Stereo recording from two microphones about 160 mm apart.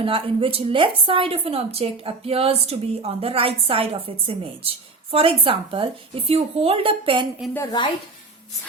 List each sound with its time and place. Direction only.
0.0 s a woman's voice: 35° right (ahead or behind)
7.5 s speech: 20° left (ahead or behind)